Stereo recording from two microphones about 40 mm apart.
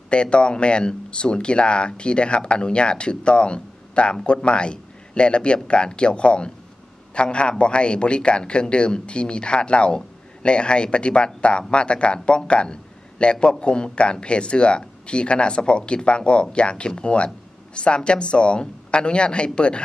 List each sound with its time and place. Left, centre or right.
0.1 s speech: left